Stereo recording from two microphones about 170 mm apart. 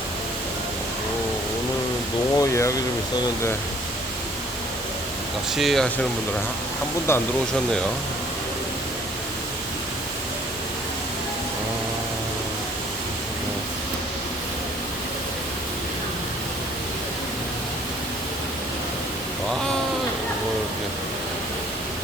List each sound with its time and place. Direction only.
2.4 s speech: 15° left (ahead or behind)
5.5 s speech: centre (ahead or behind)
7.1 s speech: 15° left (ahead or behind)